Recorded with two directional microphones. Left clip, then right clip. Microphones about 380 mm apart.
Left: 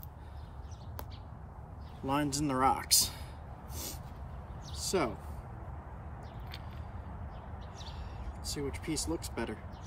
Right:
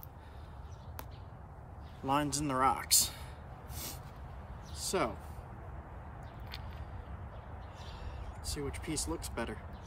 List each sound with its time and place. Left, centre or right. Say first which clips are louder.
2.0 s speech: even; centre
3.7 s a sound: left 2 dB; centre
8.5 s speech: left 2 dB; centre